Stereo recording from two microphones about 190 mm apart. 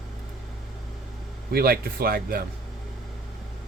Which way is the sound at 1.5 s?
55° right (ahead or behind).